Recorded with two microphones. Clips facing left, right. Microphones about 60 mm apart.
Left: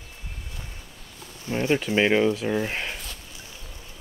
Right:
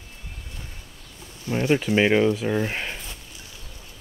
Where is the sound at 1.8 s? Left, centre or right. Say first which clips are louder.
Right 1 dB; centre.